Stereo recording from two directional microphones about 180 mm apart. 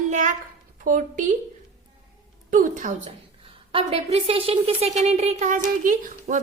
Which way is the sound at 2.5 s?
45° right (ahead or behind).